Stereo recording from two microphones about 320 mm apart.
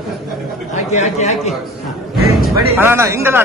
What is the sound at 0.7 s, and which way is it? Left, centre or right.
Speech, left.